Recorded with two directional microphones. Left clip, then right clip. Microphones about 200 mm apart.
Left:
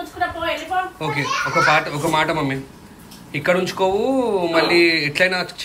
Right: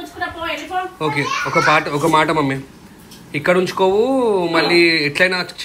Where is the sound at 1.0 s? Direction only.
10° left (ahead or behind).